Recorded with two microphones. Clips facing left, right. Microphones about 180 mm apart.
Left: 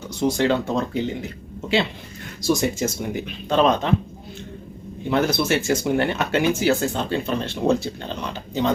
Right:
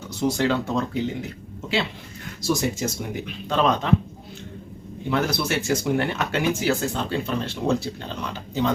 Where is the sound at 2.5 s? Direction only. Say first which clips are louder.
Left 3 dB; centre (ahead or behind).